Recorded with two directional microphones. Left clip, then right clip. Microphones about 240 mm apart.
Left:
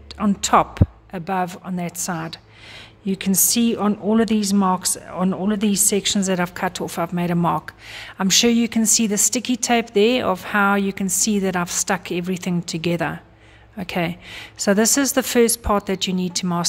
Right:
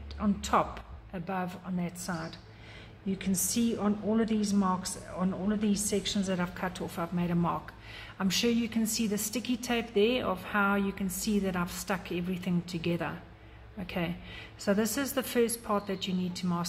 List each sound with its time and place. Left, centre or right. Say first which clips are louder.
0.2 s a woman's voice: left 11 dB; left